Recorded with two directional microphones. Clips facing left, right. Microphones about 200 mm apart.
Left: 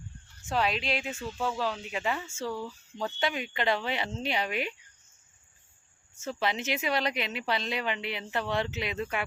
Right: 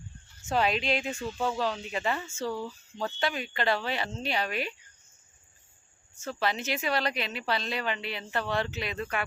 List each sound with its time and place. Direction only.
0.4 s speech: centre (ahead or behind)
2.5 s speech: 10° right (ahead or behind)
3.0 s speech: 20° left (ahead or behind)
6.2 s speech: 20° left (ahead or behind)